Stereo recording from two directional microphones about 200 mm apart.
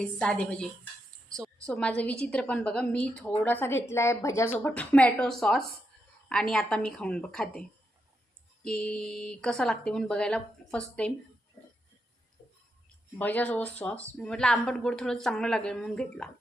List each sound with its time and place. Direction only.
0.0 s a woman's voice: 5° left (ahead or behind)
8.6 s speech: 5° left (ahead or behind)
12.4 s a sound: 25° left (ahead or behind)
13.1 s speech: 10° left (ahead or behind)